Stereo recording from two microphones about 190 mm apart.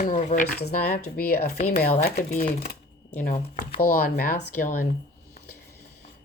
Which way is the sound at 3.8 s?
50° left (ahead or behind).